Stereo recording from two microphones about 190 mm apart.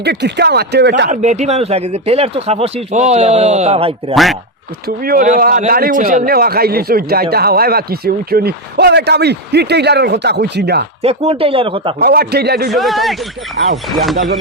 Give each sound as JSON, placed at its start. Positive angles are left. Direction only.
{"t": 0.0, "sound": "speech", "side_deg": -60}
{"t": 1.1, "sound": "speech", "side_deg": -40}
{"t": 4.1, "sound": "speech", "side_deg": 0}
{"t": 5.0, "sound": "a man's voice", "side_deg": -45}
{"t": 11.0, "sound": "speech", "side_deg": -35}
{"t": 11.9, "sound": "speech", "side_deg": -55}
{"t": 12.7, "sound": "speech", "side_deg": 0}
{"t": 13.6, "sound": "speech", "side_deg": -60}
{"t": 14.0, "sound": "speech", "side_deg": 0}